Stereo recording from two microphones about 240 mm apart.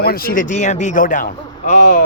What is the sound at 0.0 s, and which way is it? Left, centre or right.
Speech, left.